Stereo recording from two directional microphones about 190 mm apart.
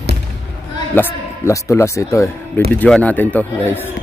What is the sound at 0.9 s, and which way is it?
A man's voice, 15° left (ahead or behind).